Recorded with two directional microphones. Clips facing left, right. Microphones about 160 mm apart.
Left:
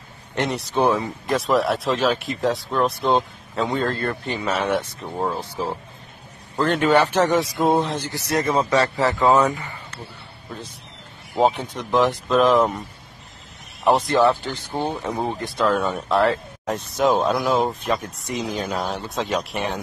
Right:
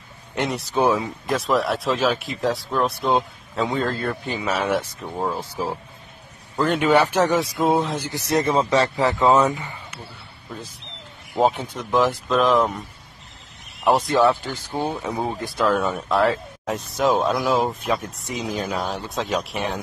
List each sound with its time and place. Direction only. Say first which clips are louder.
0.4 s speech: even; centre (ahead or behind)
6.5 s speech: even; 5° right (ahead or behind)
8.0 s speech: right 2 dB; 20° right (ahead or behind)
9.2 s speech: even; centre (ahead or behind)
9.5 s speech: even; 20° right (ahead or behind)
11.3 s speech: left 1 dB; centre (ahead or behind)
13.8 s speech: even; centre (ahead or behind)